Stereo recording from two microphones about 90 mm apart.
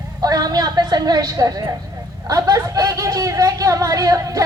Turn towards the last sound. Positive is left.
turn(degrees=-40)  # may be behind; listen again after turning